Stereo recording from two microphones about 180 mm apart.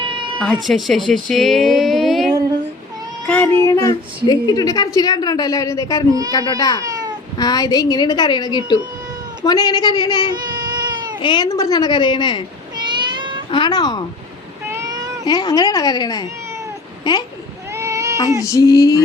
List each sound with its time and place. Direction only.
0.0 s cat: 25° right (ahead or behind)
0.4 s a woman's voice: centre (ahead or behind); by 6.8 s 20° left (ahead or behind)
6.8 s cat: 20° right (ahead or behind)
7.3 s a woman's voice: 20° left (ahead or behind)
10.5 s cat: 25° right (ahead or behind)
11.2 s a woman's voice: 25° left (ahead or behind)
12.7 s a sound: 25° right (ahead or behind)
13.5 s a woman's voice: 25° left (ahead or behind)
14.7 s a sound: 20° right (ahead or behind)
15.3 s a woman's voice: 20° left (ahead or behind)
17.7 s goat: 15° right (ahead or behind)
18.3 s a woman's voice: 20° left (ahead or behind)